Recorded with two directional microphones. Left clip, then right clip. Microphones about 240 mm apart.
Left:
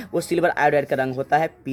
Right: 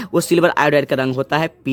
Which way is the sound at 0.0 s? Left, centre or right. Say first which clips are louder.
Right 6 dB; right.